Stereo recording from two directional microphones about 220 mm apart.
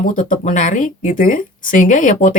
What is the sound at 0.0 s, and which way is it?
Speech, 35° left (ahead or behind).